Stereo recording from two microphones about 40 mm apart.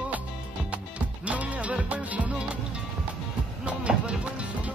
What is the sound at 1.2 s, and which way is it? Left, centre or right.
Music, right.